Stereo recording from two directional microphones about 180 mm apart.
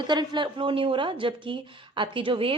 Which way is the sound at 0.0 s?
25° right (ahead or behind).